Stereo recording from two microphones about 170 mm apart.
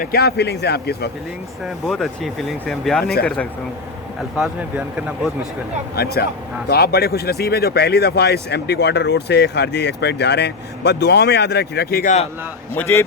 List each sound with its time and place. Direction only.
0.0 s speech: 65° left (ahead or behind)
1.6 s speech: centre (ahead or behind)
4.9 s speech: 5° right (ahead or behind)
6.0 s speech: 65° left (ahead or behind)
12.7 s speech: 15° left (ahead or behind)